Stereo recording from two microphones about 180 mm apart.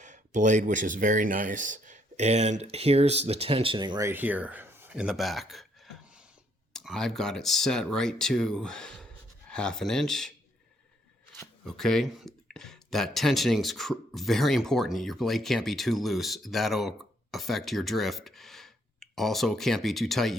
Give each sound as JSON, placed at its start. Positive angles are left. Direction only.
{"t": 0.0, "sound": "speech", "side_deg": -45}
{"t": 11.6, "sound": "speech", "side_deg": 0}